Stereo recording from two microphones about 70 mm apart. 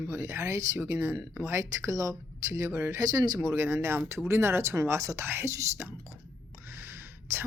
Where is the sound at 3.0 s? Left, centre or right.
Right.